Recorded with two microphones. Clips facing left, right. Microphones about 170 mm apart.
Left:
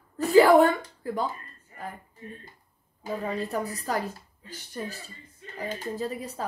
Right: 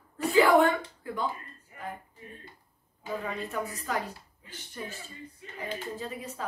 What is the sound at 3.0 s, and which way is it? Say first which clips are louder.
A woman's voice: left 4 dB; 35° left (ahead or behind).